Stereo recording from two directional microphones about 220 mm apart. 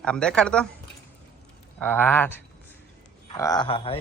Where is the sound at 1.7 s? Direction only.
5° left (ahead or behind).